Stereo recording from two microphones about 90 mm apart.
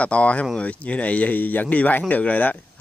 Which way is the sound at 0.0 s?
15° left (ahead or behind).